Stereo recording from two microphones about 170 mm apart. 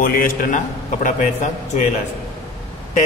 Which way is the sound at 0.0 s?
55° left (ahead or behind).